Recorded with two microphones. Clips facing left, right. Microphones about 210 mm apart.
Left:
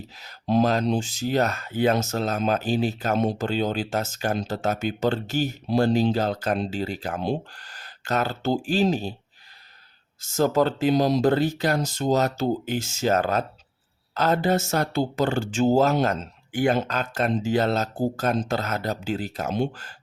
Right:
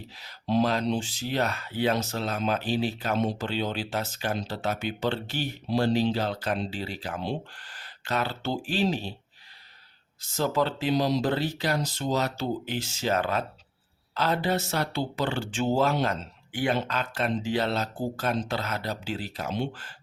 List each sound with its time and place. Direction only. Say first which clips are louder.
0.2 s speech: left 3 dB; 45° left (ahead or behind)
10.2 s speech: left 5 dB; 45° left (ahead or behind)